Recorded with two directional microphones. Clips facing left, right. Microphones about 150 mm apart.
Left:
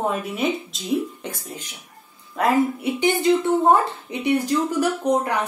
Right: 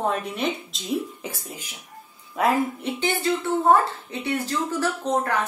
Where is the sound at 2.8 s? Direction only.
15° left (ahead or behind).